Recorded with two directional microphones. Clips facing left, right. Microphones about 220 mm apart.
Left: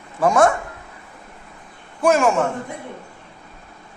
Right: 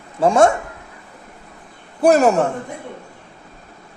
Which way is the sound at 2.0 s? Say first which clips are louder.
Right 3 dB; 35° right (ahead or behind).